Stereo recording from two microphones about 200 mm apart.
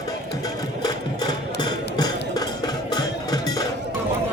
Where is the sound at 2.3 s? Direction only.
20° left (ahead or behind).